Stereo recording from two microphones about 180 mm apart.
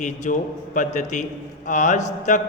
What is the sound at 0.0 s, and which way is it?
A man's voice, 45° left (ahead or behind).